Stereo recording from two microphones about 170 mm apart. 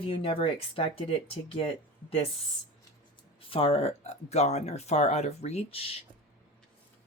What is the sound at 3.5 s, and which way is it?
Speech, 35° left (ahead or behind).